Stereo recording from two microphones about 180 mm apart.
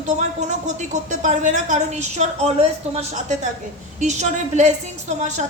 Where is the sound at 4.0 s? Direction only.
40° right (ahead or behind).